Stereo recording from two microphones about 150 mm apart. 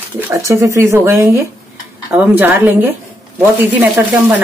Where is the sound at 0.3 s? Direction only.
20° right (ahead or behind).